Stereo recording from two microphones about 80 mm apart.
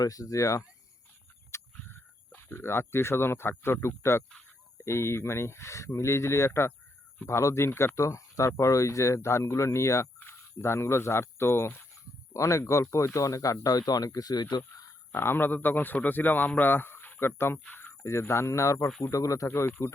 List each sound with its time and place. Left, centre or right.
0.0 s speech: left
1.5 s a sound: left
3.6 s speech: left
12.3 s speech: left
15.1 s a man's voice: left
18.0 s speech: left
19.5 s a man's voice: left